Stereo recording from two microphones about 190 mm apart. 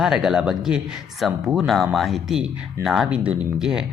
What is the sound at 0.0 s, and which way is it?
Speech, centre (ahead or behind).